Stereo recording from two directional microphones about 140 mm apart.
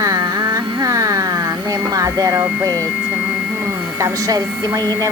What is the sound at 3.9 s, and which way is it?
Speech, 25° right (ahead or behind).